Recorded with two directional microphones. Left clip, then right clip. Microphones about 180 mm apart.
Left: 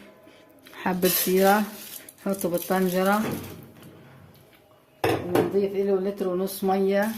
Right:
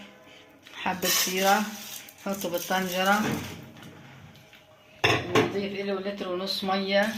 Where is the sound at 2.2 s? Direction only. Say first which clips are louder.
Left 4 dB; 60° left (ahead or behind).